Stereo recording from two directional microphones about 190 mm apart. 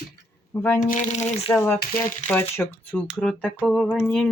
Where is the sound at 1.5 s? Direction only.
10° left (ahead or behind).